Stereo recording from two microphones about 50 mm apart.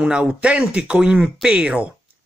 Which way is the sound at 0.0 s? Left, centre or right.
Centre.